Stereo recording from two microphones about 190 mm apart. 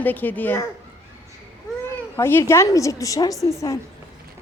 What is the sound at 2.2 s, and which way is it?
Speech, 10° left (ahead or behind).